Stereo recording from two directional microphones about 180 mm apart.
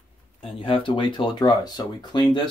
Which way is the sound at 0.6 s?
30° left (ahead or behind).